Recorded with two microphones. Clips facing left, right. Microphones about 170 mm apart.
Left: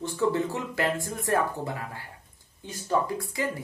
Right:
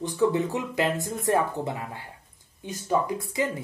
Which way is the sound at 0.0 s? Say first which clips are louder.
Right 2 dB; 20° right (ahead or behind).